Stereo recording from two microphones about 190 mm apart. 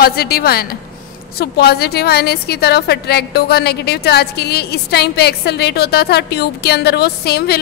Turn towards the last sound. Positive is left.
turn(degrees=55)  # may be behind; listen again after turning